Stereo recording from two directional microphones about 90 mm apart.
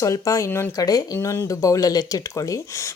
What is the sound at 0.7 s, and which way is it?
Speech, 45° left (ahead or behind).